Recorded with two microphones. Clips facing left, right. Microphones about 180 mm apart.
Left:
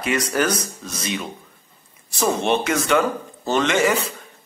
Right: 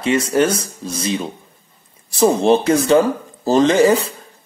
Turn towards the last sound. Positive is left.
turn(degrees=-35)  # may be behind; listen again after turning